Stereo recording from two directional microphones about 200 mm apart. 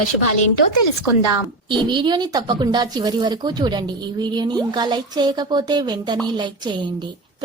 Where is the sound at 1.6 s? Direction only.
25° right (ahead or behind).